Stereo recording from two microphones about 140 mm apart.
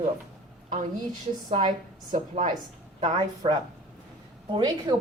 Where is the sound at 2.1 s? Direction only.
65° right (ahead or behind).